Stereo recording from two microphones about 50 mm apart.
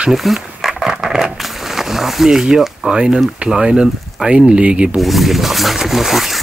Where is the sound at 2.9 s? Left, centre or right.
Centre.